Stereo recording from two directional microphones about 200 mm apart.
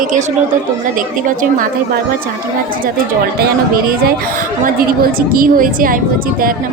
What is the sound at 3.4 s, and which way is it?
A woman's voice, 45° right (ahead or behind).